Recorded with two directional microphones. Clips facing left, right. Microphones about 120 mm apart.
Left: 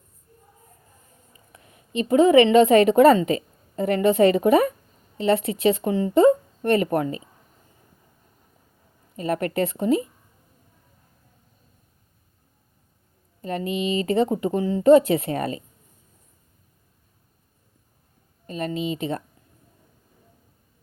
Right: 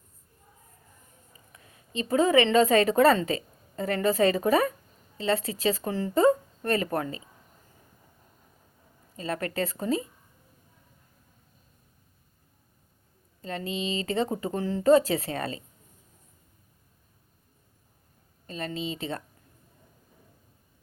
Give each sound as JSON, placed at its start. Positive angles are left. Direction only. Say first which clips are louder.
{"t": 1.5, "sound": "a woman's voice", "louder": "left 7 dB", "side_deg": 25}
{"t": 9.2, "sound": "speech", "louder": "left 6 dB", "side_deg": 25}
{"t": 13.7, "sound": "speech", "louder": "left 6 dB", "side_deg": -25}
{"t": 14.3, "sound": "speech", "louder": "left 6 dB", "side_deg": 20}
{"t": 18.4, "sound": "speech", "louder": "left 6 dB", "side_deg": 20}
{"t": 18.8, "sound": "speech", "louder": "left 6 dB", "side_deg": -30}